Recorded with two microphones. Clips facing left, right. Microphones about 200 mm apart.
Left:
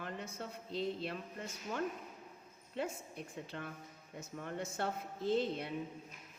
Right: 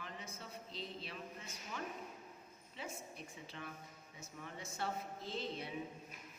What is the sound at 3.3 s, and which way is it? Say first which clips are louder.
A man's voice: left 7 dB; 55° left (ahead or behind).